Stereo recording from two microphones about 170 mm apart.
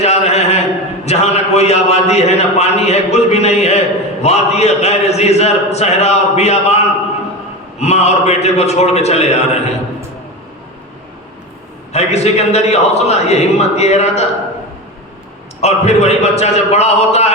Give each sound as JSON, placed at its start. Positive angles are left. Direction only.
{"t": 0.0, "sound": "a sound", "side_deg": 40}
{"t": 1.0, "sound": "a man's voice", "side_deg": 40}
{"t": 11.9, "sound": "a man's voice", "side_deg": 40}
{"t": 15.6, "sound": "a man's voice", "side_deg": 40}